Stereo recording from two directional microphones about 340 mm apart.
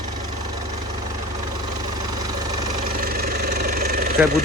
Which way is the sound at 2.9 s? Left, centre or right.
Right.